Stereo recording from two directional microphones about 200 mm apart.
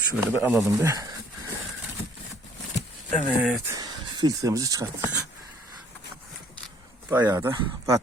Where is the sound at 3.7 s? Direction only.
20° right (ahead or behind).